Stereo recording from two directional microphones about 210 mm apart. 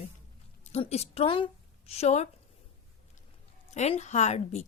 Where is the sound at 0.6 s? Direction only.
30° left (ahead or behind).